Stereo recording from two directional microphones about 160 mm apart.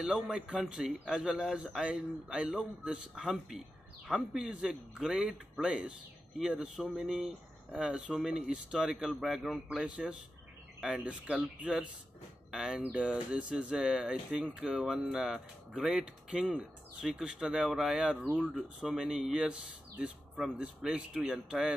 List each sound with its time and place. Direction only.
0.0 s speech: 5° right (ahead or behind)